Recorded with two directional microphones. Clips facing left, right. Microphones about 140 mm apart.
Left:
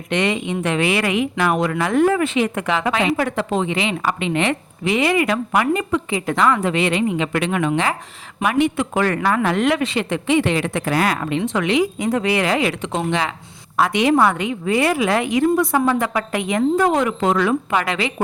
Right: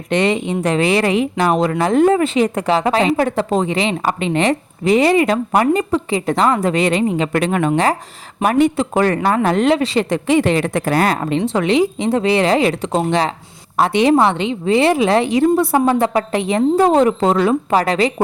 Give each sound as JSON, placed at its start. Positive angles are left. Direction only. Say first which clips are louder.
{"t": 0.1, "sound": "speech", "louder": "right 4 dB", "side_deg": -35}